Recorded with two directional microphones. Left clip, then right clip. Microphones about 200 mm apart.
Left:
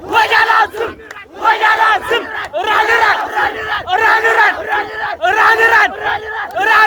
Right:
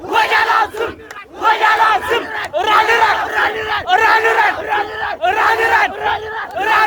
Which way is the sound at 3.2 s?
65° right (ahead or behind).